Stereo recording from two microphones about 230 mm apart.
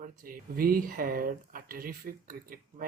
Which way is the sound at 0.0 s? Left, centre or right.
Right.